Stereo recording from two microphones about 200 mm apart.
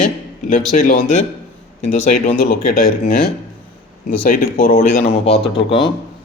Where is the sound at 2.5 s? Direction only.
45° left (ahead or behind); by 5.9 s 25° left (ahead or behind).